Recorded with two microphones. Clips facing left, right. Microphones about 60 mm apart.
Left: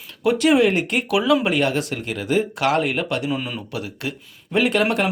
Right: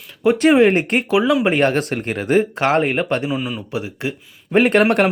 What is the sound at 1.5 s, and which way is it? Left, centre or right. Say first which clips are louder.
Speech: right 4 dB; right.